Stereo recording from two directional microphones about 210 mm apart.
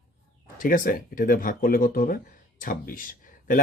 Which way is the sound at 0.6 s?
40° left (ahead or behind).